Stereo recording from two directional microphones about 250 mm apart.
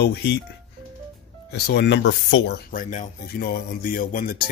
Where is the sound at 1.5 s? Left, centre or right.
Left.